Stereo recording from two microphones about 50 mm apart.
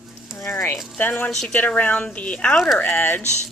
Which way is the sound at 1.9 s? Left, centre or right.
Left.